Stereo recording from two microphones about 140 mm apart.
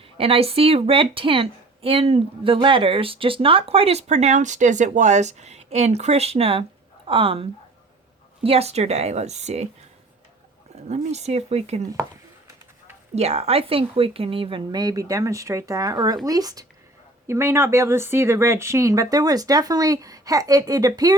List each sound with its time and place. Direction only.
0.2 s a woman's voice: 45° right (ahead or behind)
8.4 s a woman's voice: 45° right (ahead or behind)
10.8 s a woman's voice: 50° right (ahead or behind)
13.1 s speech: 50° right (ahead or behind); by 21.2 s 25° right (ahead or behind)